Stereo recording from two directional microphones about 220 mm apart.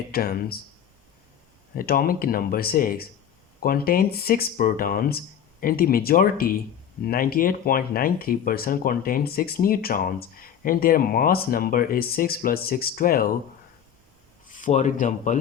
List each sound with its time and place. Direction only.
0.1 s speech: 45° left (ahead or behind)
1.7 s speech: 40° left (ahead or behind)
14.5 s speech: 35° left (ahead or behind)